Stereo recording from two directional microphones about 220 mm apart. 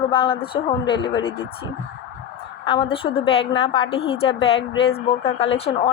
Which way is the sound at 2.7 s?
25° left (ahead or behind).